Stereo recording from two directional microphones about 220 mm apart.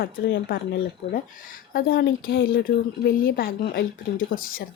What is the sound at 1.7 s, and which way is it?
A woman's voice, 45° left (ahead or behind).